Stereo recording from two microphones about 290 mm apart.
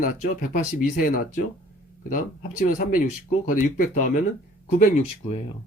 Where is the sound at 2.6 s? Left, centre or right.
Left.